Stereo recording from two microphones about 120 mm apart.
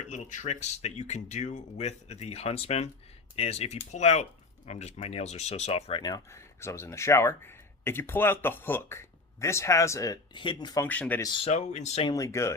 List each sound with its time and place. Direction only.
0.1 s speech: 85° left; by 5.9 s 60° left (ahead or behind)
5.9 s speech: 35° left (ahead or behind)
10.3 s speech: 40° left (ahead or behind)
10.8 s speech: 15° left (ahead or behind)
11.2 s speech: 40° left (ahead or behind)
11.4 s speech: 70° left (ahead or behind)
12.1 s speech: 25° left (ahead or behind)